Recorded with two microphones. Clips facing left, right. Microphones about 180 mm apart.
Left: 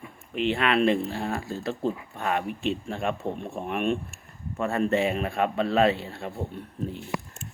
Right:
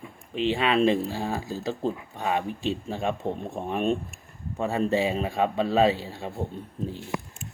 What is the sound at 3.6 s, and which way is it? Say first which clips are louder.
Speech: right 1 dB; 35° right (ahead or behind).